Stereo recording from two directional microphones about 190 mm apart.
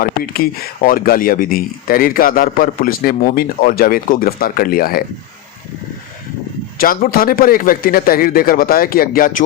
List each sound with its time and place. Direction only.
0.0 s speech: 50° left (ahead or behind)
6.7 s speech: 50° left (ahead or behind)